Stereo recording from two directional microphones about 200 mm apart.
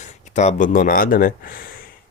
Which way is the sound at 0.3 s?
40° left (ahead or behind).